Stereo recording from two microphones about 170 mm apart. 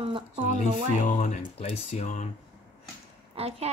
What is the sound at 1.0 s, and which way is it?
Speech, 45° left (ahead or behind).